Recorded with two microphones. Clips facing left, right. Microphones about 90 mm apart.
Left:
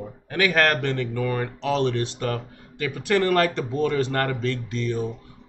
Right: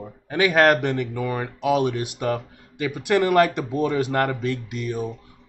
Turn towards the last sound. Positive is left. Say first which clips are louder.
# left 1 dB
turn(degrees=-15)  # may be behind; listen again after turning